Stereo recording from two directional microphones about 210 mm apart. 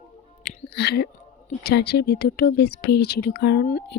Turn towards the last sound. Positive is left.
turn(degrees=45)  # may be behind; listen again after turning